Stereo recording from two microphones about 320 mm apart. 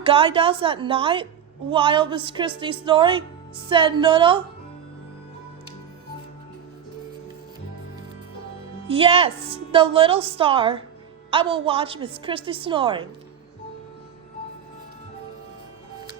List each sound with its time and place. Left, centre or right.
0.0 s a woman's voice: centre
8.9 s a woman's voice: centre